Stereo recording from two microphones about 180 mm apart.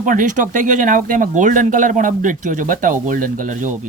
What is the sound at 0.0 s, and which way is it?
Speech, 45° right (ahead or behind).